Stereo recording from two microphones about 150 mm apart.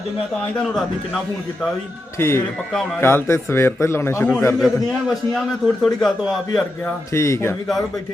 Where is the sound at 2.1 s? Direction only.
15° left (ahead or behind).